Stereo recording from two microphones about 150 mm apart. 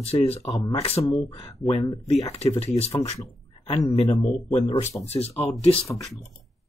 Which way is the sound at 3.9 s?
40° left (ahead or behind).